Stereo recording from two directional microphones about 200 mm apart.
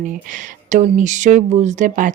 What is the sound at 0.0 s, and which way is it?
Speech, 40° right (ahead or behind).